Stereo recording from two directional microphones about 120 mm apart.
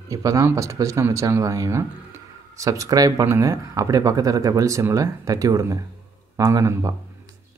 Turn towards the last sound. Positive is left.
turn(degrees=-25)  # may be behind; listen again after turning